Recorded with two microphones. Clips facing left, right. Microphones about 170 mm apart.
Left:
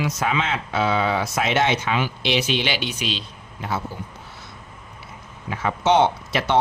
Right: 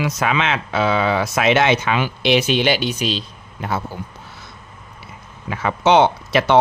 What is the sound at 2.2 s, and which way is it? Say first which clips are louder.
Speech: right 8 dB; 50° right (ahead or behind).